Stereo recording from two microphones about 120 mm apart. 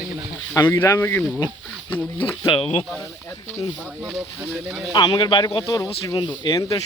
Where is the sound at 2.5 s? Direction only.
55° left (ahead or behind).